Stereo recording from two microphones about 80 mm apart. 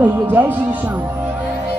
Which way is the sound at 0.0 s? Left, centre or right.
Right.